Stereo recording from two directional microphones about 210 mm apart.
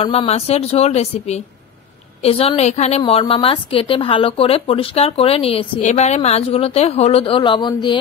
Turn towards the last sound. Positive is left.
turn(degrees=20)  # may be behind; listen again after turning